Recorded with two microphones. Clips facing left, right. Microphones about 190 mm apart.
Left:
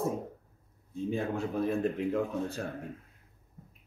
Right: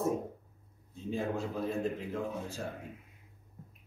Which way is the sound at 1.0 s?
60° left (ahead or behind).